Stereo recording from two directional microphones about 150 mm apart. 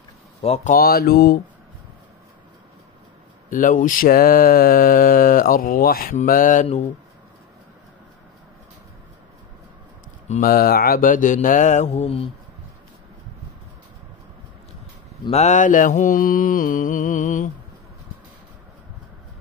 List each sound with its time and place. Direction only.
0.4 s speech: 45° left (ahead or behind)
0.7 s speech: 90° left
3.4 s mantra: 60° left (ahead or behind); by 6.1 s 80° left
6.1 s mantra: 65° left (ahead or behind)
10.4 s mantra: 80° left; by 12.3 s 45° left (ahead or behind)
15.3 s mantra: 50° left (ahead or behind)